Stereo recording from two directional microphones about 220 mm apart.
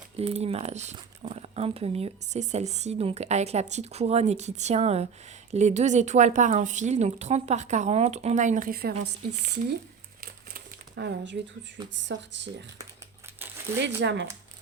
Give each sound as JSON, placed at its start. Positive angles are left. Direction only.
{"t": 0.2, "sound": "speech", "side_deg": -30}
{"t": 10.2, "sound": "crumpling", "side_deg": -45}
{"t": 12.1, "sound": "speech", "side_deg": -50}
{"t": 13.8, "sound": "speech", "side_deg": -50}